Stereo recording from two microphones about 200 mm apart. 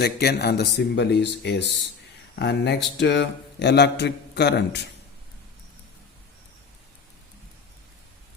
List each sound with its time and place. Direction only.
0.0 s a man's voice: 50° left (ahead or behind)